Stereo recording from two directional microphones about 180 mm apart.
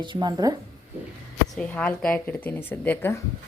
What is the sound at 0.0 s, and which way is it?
Speech, 25° right (ahead or behind).